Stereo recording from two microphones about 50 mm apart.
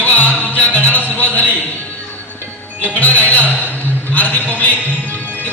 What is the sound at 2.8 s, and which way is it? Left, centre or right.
Music, left.